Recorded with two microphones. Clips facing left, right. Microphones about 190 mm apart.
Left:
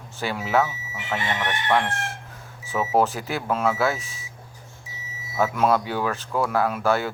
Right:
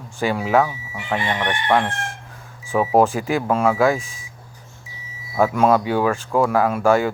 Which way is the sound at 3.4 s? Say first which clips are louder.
Right 3 dB; 50° right (ahead or behind).